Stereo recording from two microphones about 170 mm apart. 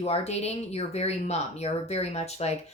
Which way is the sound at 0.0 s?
40° left (ahead or behind).